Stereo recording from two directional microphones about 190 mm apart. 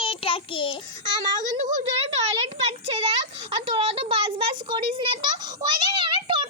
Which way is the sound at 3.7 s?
30° right (ahead or behind).